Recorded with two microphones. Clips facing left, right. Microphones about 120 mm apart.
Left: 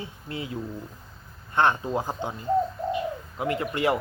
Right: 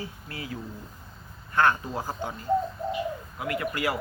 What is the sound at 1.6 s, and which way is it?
A man's voice, 25° left (ahead or behind).